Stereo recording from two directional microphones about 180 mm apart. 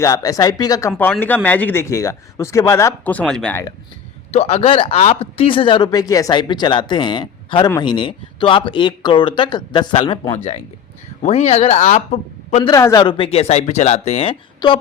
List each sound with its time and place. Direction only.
0.0 s speech: 20° left (ahead or behind)
4.3 s speech: 35° left (ahead or behind)
10.3 s speech: 40° left (ahead or behind)
12.6 s speech: 20° left (ahead or behind)